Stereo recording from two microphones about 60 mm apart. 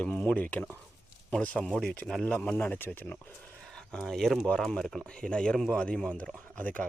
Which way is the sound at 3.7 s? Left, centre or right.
Centre.